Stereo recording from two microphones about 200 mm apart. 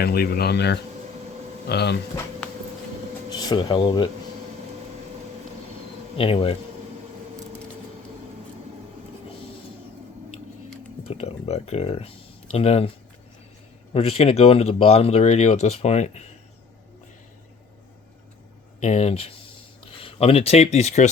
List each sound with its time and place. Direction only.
0.0 s speech: 50° left (ahead or behind)
3.3 s speech: 20° left (ahead or behind)
6.1 s speech: 25° left (ahead or behind)
11.0 s speech: 30° left (ahead or behind)
13.9 s speech: 30° left (ahead or behind)
18.8 s speech: 35° left (ahead or behind)